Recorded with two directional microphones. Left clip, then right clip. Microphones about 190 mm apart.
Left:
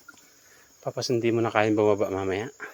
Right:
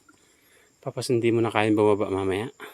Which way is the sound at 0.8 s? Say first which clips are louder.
Right 1 dB; 25° right (ahead or behind).